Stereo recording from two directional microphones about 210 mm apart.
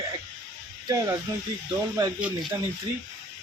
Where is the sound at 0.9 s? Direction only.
15° right (ahead or behind).